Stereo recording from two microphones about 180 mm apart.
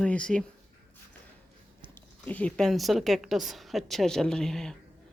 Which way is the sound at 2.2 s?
10° left (ahead or behind).